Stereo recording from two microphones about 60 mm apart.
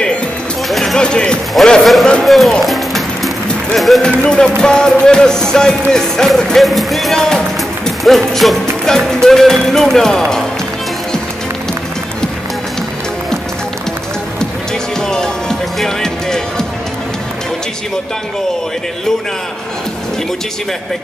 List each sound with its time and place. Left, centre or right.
0.7 s a sound: centre
0.9 s music: centre
1.8 s a man's voice: centre
2.6 s music: centre
3.7 s a man's voice: centre
4.0 s music: centre
15.0 s music: centre